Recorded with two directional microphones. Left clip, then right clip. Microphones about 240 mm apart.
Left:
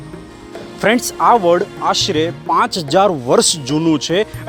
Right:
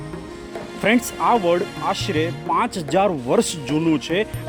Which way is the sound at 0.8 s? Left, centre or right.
Centre.